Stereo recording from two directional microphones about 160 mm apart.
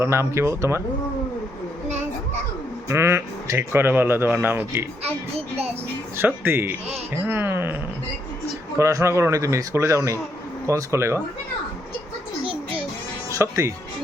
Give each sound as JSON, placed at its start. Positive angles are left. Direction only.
{"t": 0.0, "sound": "speech", "side_deg": -15}
{"t": 2.9, "sound": "speech", "side_deg": -15}
{"t": 6.1, "sound": "speech", "side_deg": -15}
{"t": 8.8, "sound": "a man's voice", "side_deg": -20}
{"t": 13.4, "sound": "speech", "side_deg": -15}